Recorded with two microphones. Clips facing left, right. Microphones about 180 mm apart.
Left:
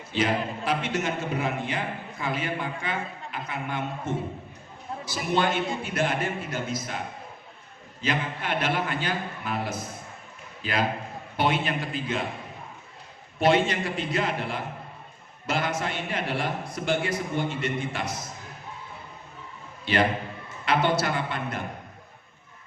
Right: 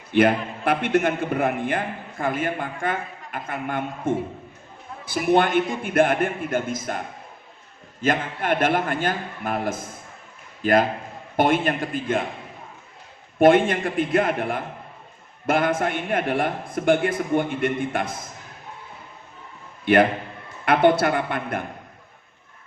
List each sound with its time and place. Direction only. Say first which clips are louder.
0.1 s a man's voice: right 7 dB; 55° right (ahead or behind)
8.0 s a man's voice: right 6 dB; 50° right (ahead or behind)
13.4 s a man's voice: right 6 dB; 50° right (ahead or behind)
19.8 s a man's voice: right 7 dB; 55° right (ahead or behind)